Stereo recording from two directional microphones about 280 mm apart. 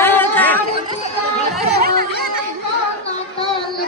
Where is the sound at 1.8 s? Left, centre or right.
Right.